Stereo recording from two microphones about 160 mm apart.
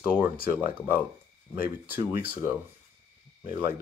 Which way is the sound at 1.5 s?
15° right (ahead or behind).